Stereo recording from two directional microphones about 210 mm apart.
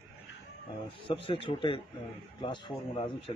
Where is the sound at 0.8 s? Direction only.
25° left (ahead or behind).